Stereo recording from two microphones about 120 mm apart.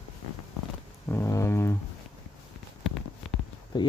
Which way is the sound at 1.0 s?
20° left (ahead or behind).